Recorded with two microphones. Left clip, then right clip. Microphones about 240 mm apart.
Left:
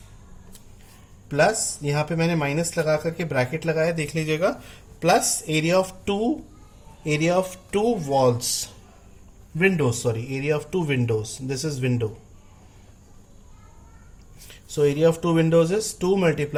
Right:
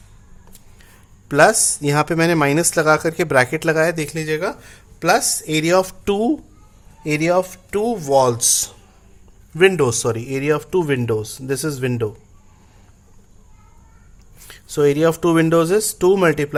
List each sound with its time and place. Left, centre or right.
1.3 s speech: right
3.9 s speech: right
5.5 s speech: right
7.9 s speech: right
9.7 s speech: right
14.8 s speech: right